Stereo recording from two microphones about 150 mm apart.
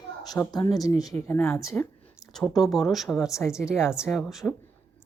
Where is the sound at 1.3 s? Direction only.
10° left (ahead or behind).